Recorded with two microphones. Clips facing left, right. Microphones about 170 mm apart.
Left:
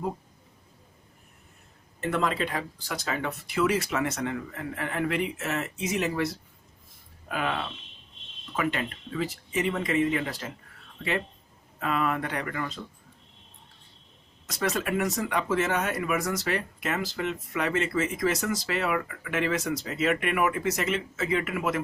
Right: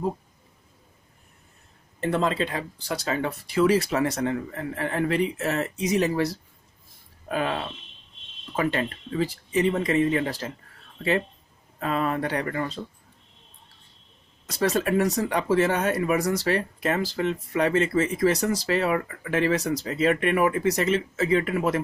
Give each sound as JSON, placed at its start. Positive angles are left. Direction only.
{"t": 2.0, "sound": "speech", "side_deg": -30}
{"t": 11.8, "sound": "speech", "side_deg": -35}
{"t": 14.4, "sound": "speech", "side_deg": -35}